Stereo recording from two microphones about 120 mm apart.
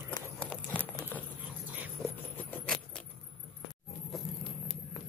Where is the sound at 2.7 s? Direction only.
10° left (ahead or behind).